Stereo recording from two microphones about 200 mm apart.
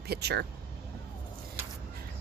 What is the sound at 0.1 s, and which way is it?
Speech, 55° right (ahead or behind).